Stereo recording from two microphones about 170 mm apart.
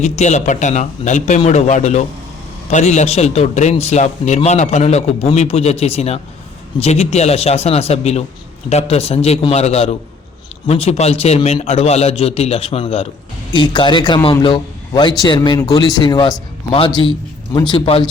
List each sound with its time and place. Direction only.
0.0 s a man's voice: 45° left (ahead or behind)